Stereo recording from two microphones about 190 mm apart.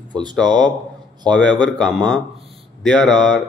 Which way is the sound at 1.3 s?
5° left (ahead or behind).